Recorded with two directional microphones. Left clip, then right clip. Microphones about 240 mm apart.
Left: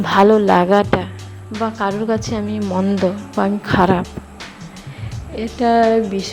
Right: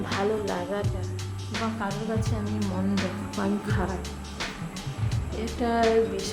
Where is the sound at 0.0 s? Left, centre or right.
Left.